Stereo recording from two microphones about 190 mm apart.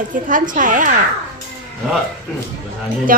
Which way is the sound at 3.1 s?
50° right (ahead or behind).